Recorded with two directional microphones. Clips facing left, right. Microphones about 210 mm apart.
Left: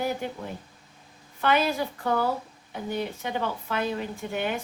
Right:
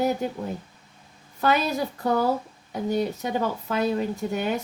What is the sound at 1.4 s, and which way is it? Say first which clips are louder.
Speech: right 1 dB; 40° right (ahead or behind).